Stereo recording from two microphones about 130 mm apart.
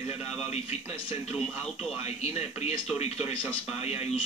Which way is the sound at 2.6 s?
55° left (ahead or behind).